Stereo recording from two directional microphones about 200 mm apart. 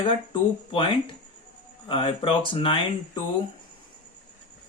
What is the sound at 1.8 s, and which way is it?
Speech, 25° left (ahead or behind).